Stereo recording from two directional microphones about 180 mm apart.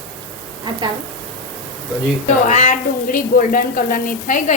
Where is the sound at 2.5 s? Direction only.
45° left (ahead or behind).